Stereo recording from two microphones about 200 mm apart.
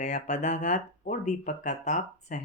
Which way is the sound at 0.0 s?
35° left (ahead or behind).